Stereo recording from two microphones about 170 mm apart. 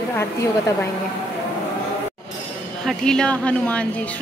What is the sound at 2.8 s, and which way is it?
Speech, 5° left (ahead or behind).